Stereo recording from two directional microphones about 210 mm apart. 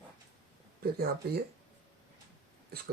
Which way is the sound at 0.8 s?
50° right (ahead or behind).